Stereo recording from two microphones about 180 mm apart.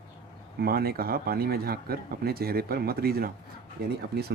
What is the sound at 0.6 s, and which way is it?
Speech, 60° right (ahead or behind).